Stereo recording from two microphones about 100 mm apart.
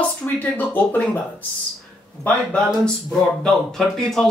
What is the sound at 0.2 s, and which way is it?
Speech, 15° left (ahead or behind).